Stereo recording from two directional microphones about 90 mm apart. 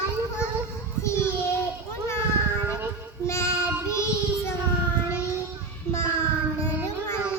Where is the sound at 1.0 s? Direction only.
30° left (ahead or behind).